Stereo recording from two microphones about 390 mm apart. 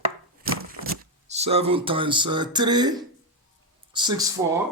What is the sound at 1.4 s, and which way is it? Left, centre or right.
Speech, centre.